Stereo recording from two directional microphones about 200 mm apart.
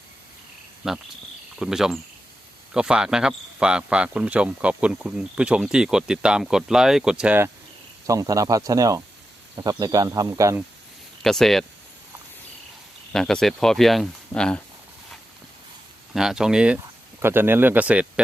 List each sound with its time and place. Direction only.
0.8 s speech: 5° right (ahead or behind)
11.2 s speech: centre (ahead or behind)
13.1 s speech: centre (ahead or behind)
16.1 s speech: centre (ahead or behind)